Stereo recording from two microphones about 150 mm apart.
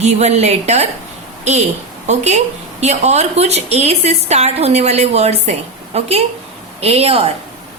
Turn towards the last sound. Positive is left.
turn(degrees=-40)  # may be behind; listen again after turning